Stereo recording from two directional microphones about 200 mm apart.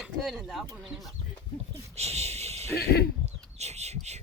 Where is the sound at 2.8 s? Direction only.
50° left (ahead or behind).